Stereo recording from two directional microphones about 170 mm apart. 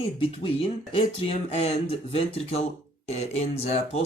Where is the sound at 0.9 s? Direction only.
35° left (ahead or behind).